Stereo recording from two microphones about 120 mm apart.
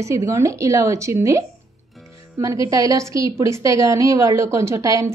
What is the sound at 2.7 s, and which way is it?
A woman's voice, 30° right (ahead or behind).